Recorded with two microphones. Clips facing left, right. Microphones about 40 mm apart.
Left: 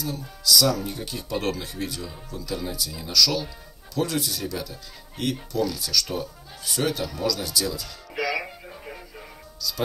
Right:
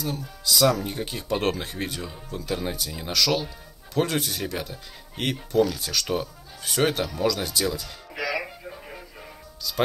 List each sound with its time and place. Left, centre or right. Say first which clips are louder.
0.4 s speech: even; right
8.2 s music: left 1 dB; centre